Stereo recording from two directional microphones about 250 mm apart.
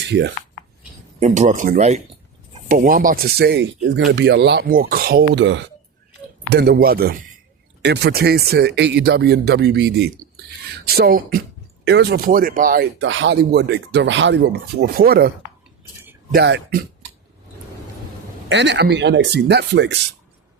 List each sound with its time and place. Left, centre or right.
0.0 s speech: right
1.2 s speech: right
13.0 s speech: right
16.3 s speech: right
18.4 s speech: right